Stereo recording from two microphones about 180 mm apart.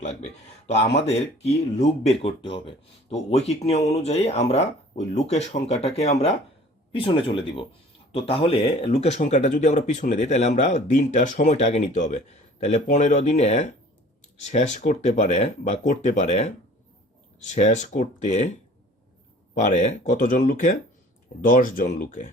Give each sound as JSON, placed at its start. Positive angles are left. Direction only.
{"t": 0.9, "sound": "speech", "side_deg": 35}
{"t": 19.5, "sound": "speech", "side_deg": 40}